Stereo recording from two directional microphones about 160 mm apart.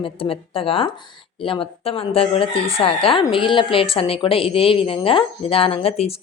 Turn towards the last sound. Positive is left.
turn(degrees=40)  # may be behind; listen again after turning